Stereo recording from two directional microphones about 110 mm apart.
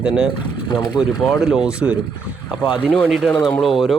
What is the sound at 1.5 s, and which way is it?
Speech, 10° right (ahead or behind).